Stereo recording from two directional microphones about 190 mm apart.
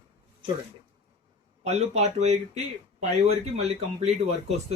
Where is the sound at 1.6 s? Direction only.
35° right (ahead or behind).